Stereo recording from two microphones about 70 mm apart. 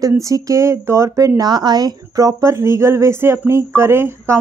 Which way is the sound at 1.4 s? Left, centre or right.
Right.